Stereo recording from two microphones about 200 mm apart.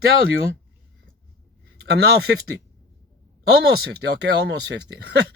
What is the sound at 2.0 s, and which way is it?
Speech, 55° right (ahead or behind).